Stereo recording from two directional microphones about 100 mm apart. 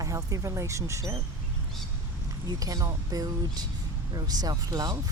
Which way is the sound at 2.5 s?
35° right (ahead or behind).